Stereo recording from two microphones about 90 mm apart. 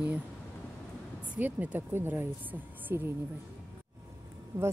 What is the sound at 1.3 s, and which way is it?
Speech, 20° right (ahead or behind).